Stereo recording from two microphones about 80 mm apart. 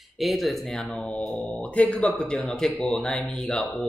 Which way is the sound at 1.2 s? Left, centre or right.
Centre.